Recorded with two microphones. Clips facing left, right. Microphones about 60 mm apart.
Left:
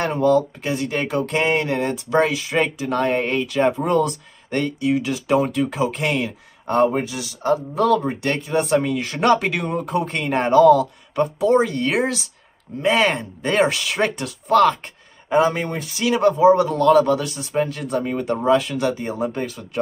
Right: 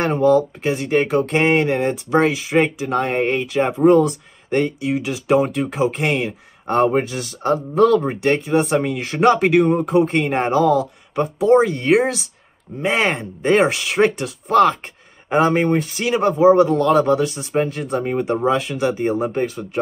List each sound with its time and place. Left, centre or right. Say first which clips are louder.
0.0 s speech: right 2 dB; right
5.6 s speech: right 1 dB; right
6.8 s speech: right 2 dB; right
8.0 s speech: right 4 dB; right
9.9 s speech: right 2 dB; right
15.3 s speech: right 3 dB; right